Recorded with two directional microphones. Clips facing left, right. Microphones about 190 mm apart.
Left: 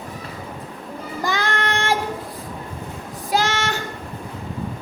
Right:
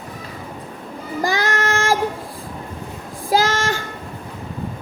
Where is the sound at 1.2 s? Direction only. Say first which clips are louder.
Right 3 dB; 45° right (ahead or behind).